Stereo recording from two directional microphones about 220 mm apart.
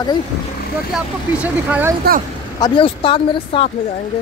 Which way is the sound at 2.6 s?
25° left (ahead or behind).